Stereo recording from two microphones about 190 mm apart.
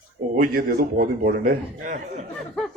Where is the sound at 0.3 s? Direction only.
50° right (ahead or behind).